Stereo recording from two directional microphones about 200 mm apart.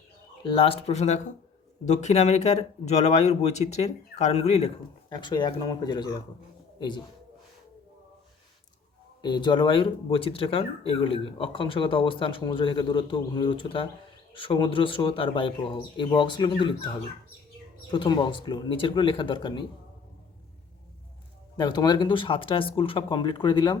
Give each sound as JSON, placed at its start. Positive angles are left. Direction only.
{"t": 0.4, "sound": "speech", "side_deg": 25}
{"t": 5.0, "sound": "speech", "side_deg": 20}
{"t": 9.2, "sound": "speech", "side_deg": 20}
{"t": 21.5, "sound": "speech", "side_deg": 20}